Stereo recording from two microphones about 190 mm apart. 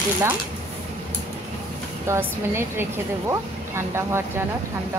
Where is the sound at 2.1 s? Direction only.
10° right (ahead or behind).